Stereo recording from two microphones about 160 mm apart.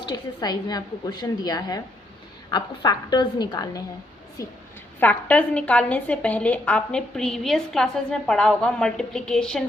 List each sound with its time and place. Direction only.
0.0 s a woman's voice: 25° left (ahead or behind)
4.9 s a woman's voice: 10° left (ahead or behind)